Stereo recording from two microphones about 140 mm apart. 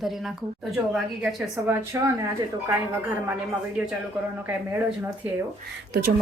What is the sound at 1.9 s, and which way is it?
Speech, 20° right (ahead or behind).